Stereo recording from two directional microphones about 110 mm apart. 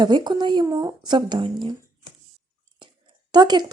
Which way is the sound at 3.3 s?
40° right (ahead or behind).